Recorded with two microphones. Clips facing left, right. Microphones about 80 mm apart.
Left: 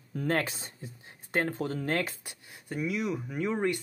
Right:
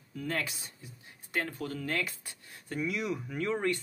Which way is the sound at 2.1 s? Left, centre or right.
Centre.